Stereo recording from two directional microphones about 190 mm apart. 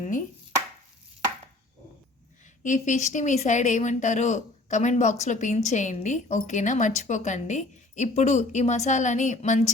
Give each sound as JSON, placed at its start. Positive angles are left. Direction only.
{"t": 0.0, "sound": "speech", "side_deg": 40}
{"t": 2.6, "sound": "speech", "side_deg": 40}